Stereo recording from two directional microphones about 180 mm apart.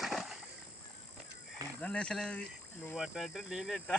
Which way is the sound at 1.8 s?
5° left (ahead or behind).